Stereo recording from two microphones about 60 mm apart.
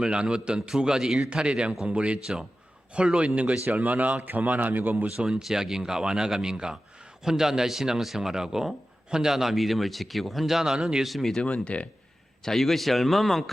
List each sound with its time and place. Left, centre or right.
0.0 s a man's voice: centre; by 5.0 s right
5.0 s a man's voice: centre
11.1 s a man's voice: centre
11.4 s speech: left
12.5 s a man's voice: centre